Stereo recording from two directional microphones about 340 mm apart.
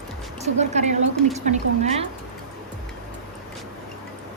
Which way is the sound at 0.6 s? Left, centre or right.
Centre.